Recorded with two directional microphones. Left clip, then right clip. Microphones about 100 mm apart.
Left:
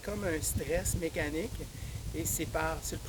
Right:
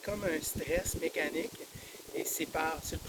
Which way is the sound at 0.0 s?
40° left (ahead or behind).